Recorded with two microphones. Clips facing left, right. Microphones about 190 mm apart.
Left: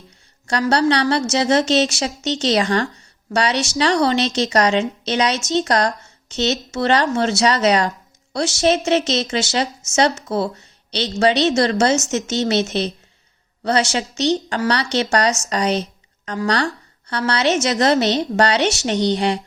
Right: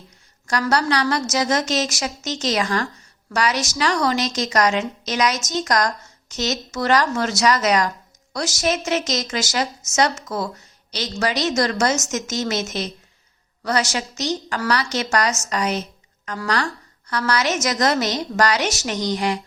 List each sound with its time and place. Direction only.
0.7 s a woman's voice: 30° left (ahead or behind)